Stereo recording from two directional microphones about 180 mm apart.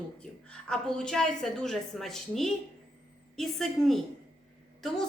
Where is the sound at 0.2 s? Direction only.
5° left (ahead or behind).